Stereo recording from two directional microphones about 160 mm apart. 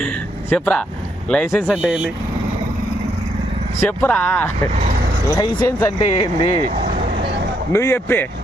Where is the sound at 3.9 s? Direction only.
10° left (ahead or behind).